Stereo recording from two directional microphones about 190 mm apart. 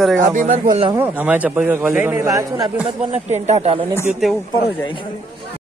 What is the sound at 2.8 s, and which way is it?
Speech, 35° right (ahead or behind).